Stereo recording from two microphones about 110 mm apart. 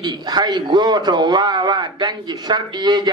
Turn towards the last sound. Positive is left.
turn(degrees=-40)  # may be behind; listen again after turning